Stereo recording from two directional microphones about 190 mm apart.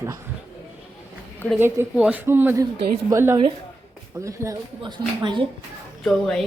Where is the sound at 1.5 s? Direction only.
10° right (ahead or behind).